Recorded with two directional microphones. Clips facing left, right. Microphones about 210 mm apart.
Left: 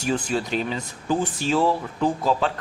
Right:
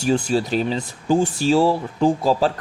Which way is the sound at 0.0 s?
30° right (ahead or behind).